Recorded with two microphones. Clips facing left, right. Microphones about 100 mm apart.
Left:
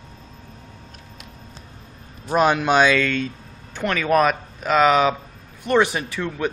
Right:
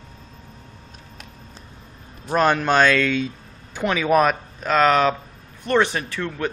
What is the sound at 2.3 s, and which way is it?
Speech, 10° left (ahead or behind).